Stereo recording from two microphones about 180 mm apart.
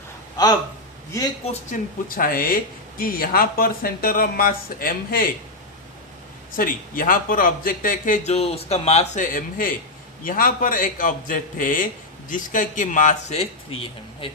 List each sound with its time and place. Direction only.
0.4 s speech: 20° left (ahead or behind)
1.7 s speech: 50° left (ahead or behind)
6.6 s speech: 50° left (ahead or behind); by 13.7 s 35° left (ahead or behind)